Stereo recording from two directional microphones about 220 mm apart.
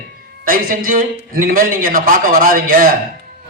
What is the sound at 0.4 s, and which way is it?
A man's voice, 40° right (ahead or behind).